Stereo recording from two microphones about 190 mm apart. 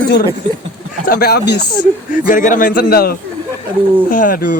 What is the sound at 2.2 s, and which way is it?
Speech, 45° left (ahead or behind).